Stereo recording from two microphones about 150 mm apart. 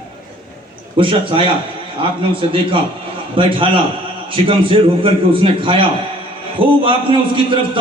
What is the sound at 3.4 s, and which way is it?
A man's voice, 35° right (ahead or behind).